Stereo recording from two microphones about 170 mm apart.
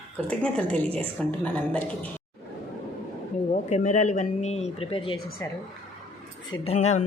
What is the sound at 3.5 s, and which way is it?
Speech, 40° left (ahead or behind).